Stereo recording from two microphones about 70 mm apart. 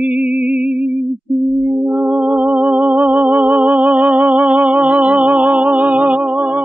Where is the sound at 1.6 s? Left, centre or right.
Centre.